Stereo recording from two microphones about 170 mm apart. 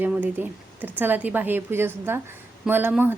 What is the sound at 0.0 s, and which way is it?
A woman's voice, 10° right (ahead or behind).